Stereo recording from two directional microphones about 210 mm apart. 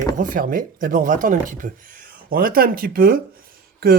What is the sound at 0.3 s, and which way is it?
Speech, 40° right (ahead or behind).